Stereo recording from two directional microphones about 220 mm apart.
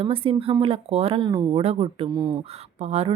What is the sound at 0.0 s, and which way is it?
Speech, 25° right (ahead or behind).